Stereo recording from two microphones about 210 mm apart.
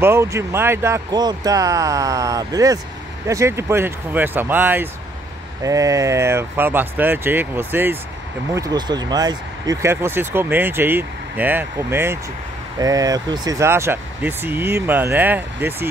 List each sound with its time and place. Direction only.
0.0 s speech: 10° right (ahead or behind)